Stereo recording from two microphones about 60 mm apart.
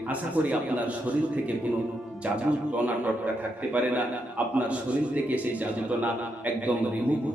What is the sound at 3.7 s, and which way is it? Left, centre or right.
A man's voice, right.